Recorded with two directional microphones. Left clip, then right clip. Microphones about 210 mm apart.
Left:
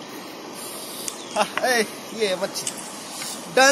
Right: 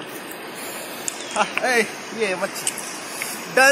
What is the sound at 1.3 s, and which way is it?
Speech, 15° left (ahead or behind).